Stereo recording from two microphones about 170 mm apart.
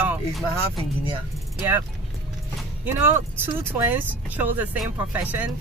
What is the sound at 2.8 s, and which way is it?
Speech, 15° right (ahead or behind).